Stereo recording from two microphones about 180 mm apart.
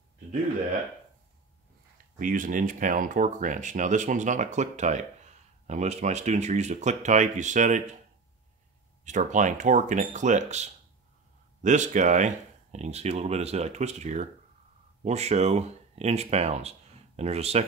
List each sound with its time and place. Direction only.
2.1 s speech: 50° right (ahead or behind)
9.0 s speech: 45° right (ahead or behind)